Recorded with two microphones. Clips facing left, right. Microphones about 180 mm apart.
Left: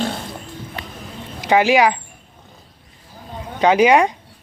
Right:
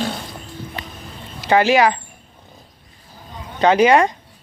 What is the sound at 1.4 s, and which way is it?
Speech, 15° left (ahead or behind).